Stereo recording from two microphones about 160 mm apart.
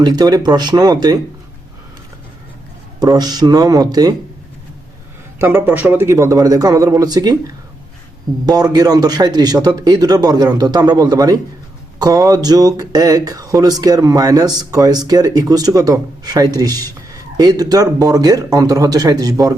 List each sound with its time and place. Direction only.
0.0 s speech: 25° right (ahead or behind)
3.0 s speech: 25° right (ahead or behind)
5.4 s speech: 15° right (ahead or behind)